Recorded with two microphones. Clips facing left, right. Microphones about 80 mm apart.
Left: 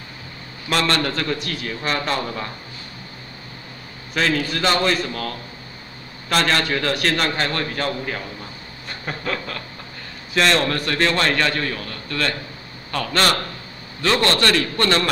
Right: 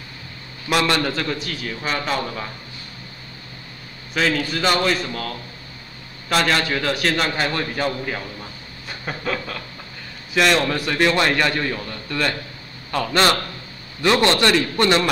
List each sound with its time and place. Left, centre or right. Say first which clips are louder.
0.7 s a man's voice: right 1 dB; centre
4.1 s a man's voice: even; centre
8.8 s a sound: right 1 dB; centre
10.3 s a man's voice: right 1 dB; centre